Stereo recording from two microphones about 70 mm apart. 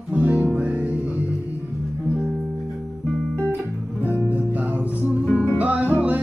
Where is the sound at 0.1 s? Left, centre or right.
Right.